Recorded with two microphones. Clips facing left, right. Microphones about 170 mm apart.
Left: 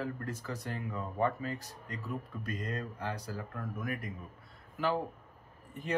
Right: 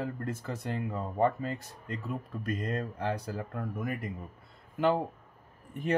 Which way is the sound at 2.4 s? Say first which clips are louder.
Right 8 dB; 55° right (ahead or behind).